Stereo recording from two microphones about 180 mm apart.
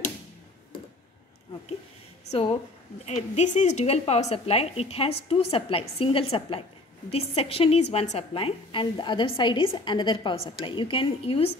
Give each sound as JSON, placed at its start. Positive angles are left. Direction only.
{"t": 3.1, "sound": "a woman's voice", "side_deg": 40}